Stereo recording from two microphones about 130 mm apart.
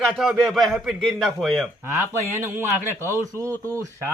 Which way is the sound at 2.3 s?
20° right (ahead or behind).